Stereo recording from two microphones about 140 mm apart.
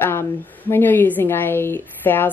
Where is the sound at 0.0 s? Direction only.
15° left (ahead or behind).